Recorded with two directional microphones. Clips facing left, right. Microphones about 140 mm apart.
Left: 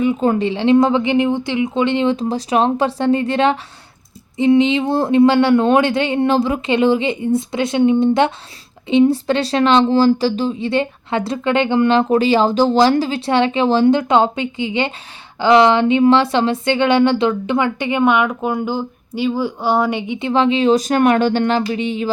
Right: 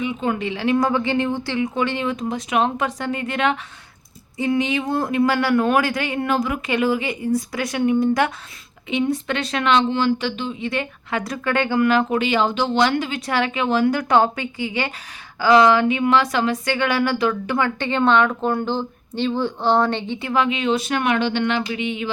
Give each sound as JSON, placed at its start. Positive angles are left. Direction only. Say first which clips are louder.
{"t": 0.0, "sound": "speech", "louder": "left 7 dB", "side_deg": 40}